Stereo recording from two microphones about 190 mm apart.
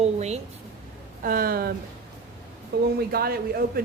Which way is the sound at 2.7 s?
60° right (ahead or behind).